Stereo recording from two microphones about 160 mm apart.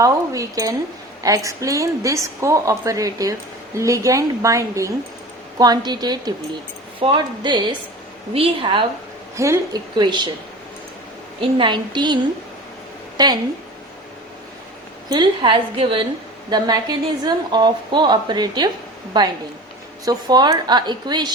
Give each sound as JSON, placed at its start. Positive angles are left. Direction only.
{"t": 0.0, "sound": "a woman's voice", "side_deg": -20}
{"t": 9.3, "sound": "a woman's voice", "side_deg": -20}
{"t": 11.3, "sound": "a woman's voice", "side_deg": -30}
{"t": 15.1, "sound": "a woman's voice", "side_deg": -30}